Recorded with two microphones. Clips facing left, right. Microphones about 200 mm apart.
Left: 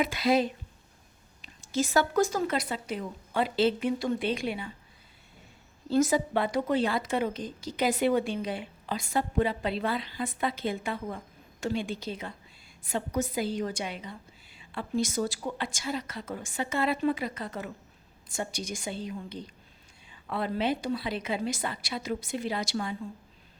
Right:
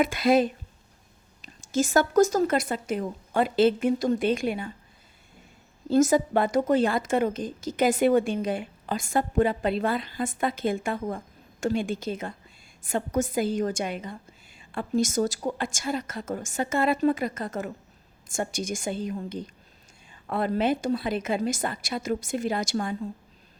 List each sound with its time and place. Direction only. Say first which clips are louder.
0.0 s a woman's voice: right 4 dB; 50° right (ahead or behind)
5.9 s a woman's voice: right 4 dB; 45° right (ahead or behind)